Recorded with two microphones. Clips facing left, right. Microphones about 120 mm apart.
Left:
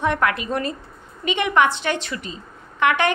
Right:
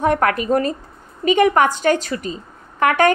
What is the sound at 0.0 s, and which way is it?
A woman's voice, 40° right (ahead or behind).